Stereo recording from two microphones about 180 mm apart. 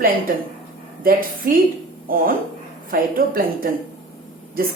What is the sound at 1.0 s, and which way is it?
A woman's voice, 50° right (ahead or behind).